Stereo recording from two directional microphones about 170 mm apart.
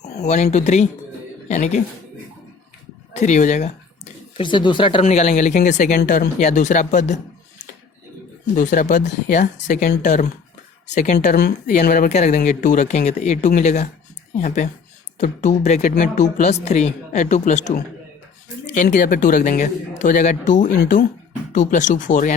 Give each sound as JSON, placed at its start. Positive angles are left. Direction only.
{"t": 0.0, "sound": "speech", "side_deg": 40}
{"t": 3.1, "sound": "speech", "side_deg": 45}
{"t": 4.4, "sound": "speech", "side_deg": 30}
{"t": 8.5, "sound": "speech", "side_deg": 50}
{"t": 18.8, "sound": "speech", "side_deg": 45}